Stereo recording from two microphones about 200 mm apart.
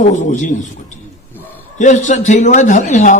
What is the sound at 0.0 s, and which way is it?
A man's voice, 35° left (ahead or behind).